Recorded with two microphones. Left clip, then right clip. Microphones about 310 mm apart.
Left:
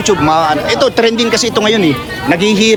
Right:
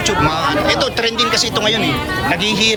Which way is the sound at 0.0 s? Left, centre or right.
Centre.